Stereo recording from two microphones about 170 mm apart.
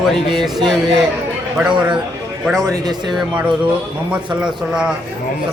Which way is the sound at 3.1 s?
5° right (ahead or behind).